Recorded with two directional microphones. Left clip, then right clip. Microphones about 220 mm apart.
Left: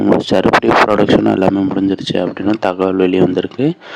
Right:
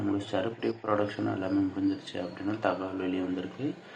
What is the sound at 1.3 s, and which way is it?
A man's voice, 50° left (ahead or behind).